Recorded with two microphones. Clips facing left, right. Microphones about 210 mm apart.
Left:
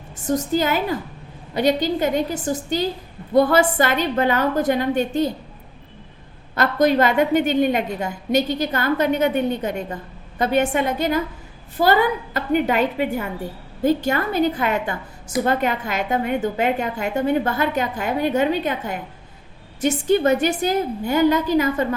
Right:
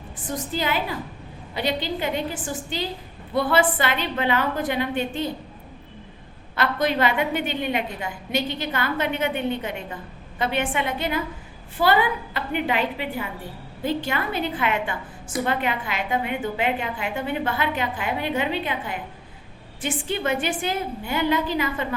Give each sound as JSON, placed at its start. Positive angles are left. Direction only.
{"t": 0.3, "sound": "a woman's voice", "side_deg": 45}
{"t": 6.6, "sound": "a woman's voice", "side_deg": 40}